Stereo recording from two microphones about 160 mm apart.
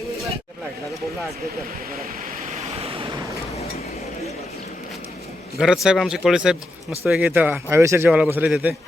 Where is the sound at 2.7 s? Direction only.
35° right (ahead or behind).